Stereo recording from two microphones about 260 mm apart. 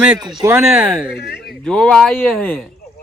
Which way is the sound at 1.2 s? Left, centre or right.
Left.